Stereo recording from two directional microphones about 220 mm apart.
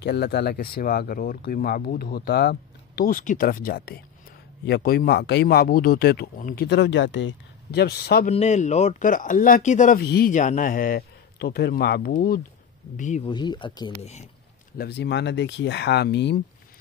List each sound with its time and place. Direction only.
0.0 s speech: 50° left (ahead or behind)
8.3 s speech: 30° left (ahead or behind)
13.3 s speech: 20° left (ahead or behind)
14.8 s speech: 50° left (ahead or behind)